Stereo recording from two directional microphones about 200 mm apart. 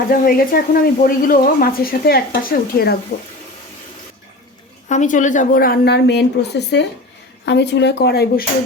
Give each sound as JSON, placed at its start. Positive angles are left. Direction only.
{"t": 0.1, "sound": "speech", "side_deg": 45}
{"t": 4.9, "sound": "speech", "side_deg": 40}